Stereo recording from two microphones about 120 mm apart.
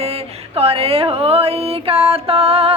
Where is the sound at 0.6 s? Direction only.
55° right (ahead or behind).